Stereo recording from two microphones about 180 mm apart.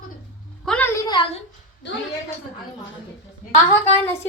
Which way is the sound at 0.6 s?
5° left (ahead or behind).